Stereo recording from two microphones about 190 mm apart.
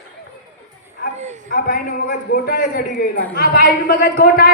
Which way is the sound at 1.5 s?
55° left (ahead or behind).